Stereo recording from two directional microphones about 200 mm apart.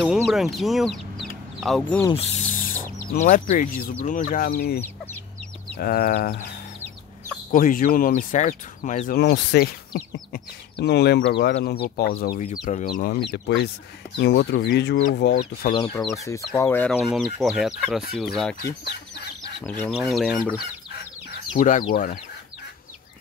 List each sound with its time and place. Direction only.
0.2 s speech: centre (ahead or behind)
2.0 s wild animals: 30° left (ahead or behind)
3.1 s speech: 40° left (ahead or behind)
4.8 s chicken: 10° left (ahead or behind)
5.8 s speech: 50° left (ahead or behind)
7.5 s speech: 45° left (ahead or behind)
9.2 s speech: 55° left (ahead or behind)
16.0 s speech: centre (ahead or behind)
19.9 s speech: centre (ahead or behind)
21.5 s speech: 40° left (ahead or behind)